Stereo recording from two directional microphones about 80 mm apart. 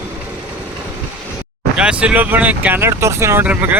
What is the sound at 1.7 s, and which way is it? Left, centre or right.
Speech, centre.